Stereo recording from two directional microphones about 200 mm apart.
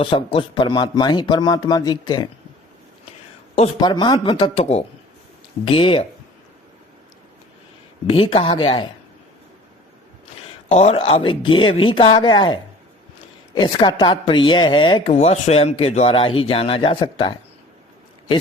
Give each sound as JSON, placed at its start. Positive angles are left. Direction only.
{"t": 0.0, "sound": "speech", "side_deg": 25}
{"t": 3.8, "sound": "speech", "side_deg": 20}
{"t": 8.0, "sound": "speech", "side_deg": 30}
{"t": 10.7, "sound": "speech", "side_deg": 35}